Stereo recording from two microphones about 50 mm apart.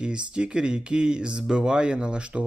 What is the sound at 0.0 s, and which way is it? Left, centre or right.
Speech, centre.